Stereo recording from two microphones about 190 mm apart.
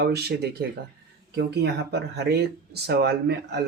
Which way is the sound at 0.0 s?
60° right (ahead or behind).